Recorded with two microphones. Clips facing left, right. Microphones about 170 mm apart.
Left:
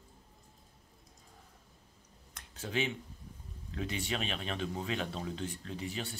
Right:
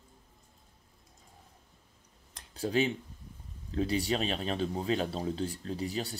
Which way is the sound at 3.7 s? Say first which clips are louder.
Right 7 dB; 35° right (ahead or behind).